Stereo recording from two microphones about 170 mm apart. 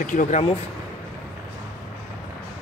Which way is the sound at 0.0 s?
50° left (ahead or behind).